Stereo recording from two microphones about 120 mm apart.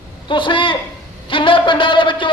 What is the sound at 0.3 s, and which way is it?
Speech, 45° left (ahead or behind).